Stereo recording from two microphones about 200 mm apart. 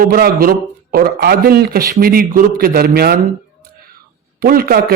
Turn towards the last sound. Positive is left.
turn(degrees=-50)  # may be behind; listen again after turning